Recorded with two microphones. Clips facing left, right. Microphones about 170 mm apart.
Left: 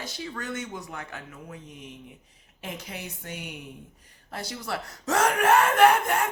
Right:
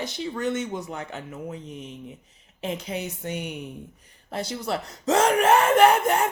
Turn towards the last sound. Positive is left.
turn(degrees=-20)  # may be behind; listen again after turning